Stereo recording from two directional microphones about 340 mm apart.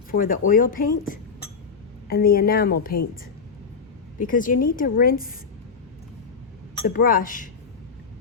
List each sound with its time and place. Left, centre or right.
0.1 s speech: left
4.2 s speech: left
6.8 s speech: left